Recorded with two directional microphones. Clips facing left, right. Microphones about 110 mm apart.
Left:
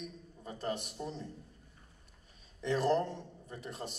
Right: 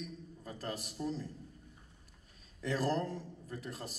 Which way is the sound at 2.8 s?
25° left (ahead or behind).